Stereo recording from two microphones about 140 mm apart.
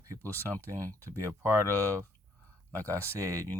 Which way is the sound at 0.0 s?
20° right (ahead or behind).